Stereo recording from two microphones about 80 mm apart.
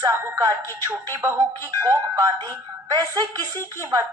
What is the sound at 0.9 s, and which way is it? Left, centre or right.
Speech, right.